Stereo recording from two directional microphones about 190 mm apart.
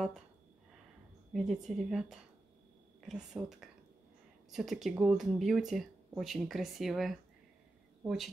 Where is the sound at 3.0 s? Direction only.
5° right (ahead or behind).